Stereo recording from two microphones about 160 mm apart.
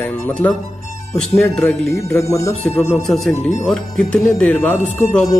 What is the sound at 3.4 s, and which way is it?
Speech, 45° left (ahead or behind).